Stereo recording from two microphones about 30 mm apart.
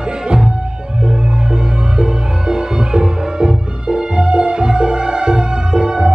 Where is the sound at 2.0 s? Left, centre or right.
Right.